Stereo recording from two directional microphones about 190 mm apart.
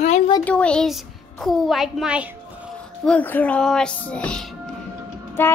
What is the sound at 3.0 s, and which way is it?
A woman's voice, 10° left (ahead or behind).